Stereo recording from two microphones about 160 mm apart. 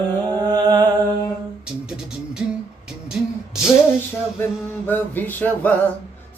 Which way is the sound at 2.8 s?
5° right (ahead or behind).